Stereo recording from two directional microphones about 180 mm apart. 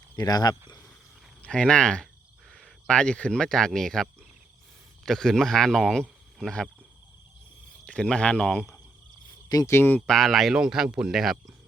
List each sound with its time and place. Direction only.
0.2 s speech: 20° left (ahead or behind)
1.4 s speech: 5° left (ahead or behind)
7.9 s speech: 5° left (ahead or behind)
9.5 s speech: 20° left (ahead or behind); by 11.5 s centre (ahead or behind)